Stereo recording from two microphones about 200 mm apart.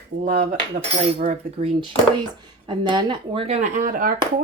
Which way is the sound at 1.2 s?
30° right (ahead or behind).